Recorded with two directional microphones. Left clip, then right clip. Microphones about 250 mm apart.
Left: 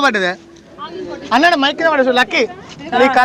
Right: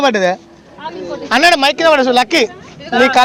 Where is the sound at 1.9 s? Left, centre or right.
Right.